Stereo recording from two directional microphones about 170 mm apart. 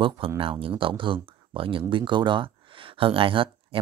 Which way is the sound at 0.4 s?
30° right (ahead or behind).